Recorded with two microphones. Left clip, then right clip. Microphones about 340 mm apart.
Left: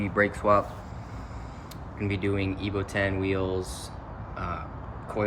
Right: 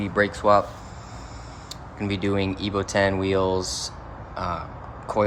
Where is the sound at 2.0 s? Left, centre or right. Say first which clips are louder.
Right 4 dB; centre.